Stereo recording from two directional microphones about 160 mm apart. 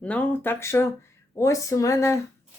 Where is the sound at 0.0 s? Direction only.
10° left (ahead or behind).